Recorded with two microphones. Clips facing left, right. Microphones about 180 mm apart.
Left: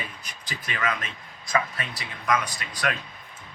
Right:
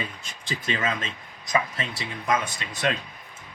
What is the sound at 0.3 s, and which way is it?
Speech, 25° right (ahead or behind).